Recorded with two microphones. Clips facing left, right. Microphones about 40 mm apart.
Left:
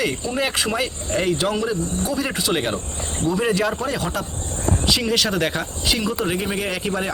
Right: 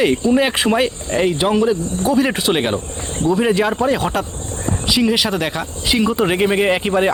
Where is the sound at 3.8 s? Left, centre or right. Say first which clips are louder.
Right 7 dB; right.